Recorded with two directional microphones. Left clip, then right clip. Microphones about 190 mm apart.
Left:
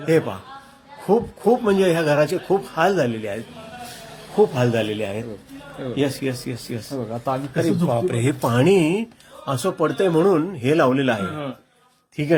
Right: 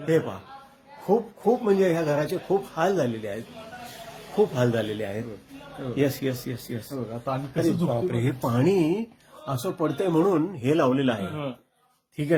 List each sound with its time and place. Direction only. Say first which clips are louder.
0.0 s speech: left 5 dB; centre (ahead or behind)
5.9 s a man's voice: left 2 dB; 15° right (ahead or behind)